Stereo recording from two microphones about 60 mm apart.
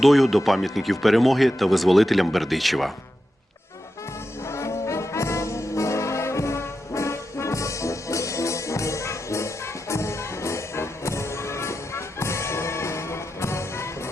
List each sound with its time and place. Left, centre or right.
0.0 s speech: centre
4.4 s brass instrument: left